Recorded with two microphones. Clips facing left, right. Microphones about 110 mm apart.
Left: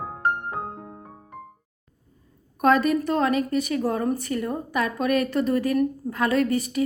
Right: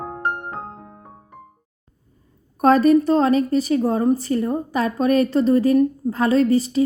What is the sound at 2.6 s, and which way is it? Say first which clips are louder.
A woman's voice: right 6 dB; 35° right (ahead or behind).